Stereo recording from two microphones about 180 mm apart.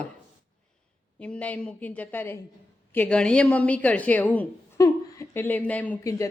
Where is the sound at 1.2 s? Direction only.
5° left (ahead or behind).